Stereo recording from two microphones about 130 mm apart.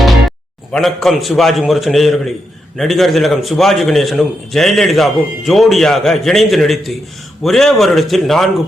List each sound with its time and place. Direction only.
0.0 s a man's voice: centre (ahead or behind)